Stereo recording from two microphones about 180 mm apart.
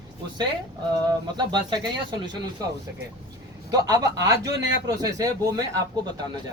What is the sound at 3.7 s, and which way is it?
Speech, 20° right (ahead or behind).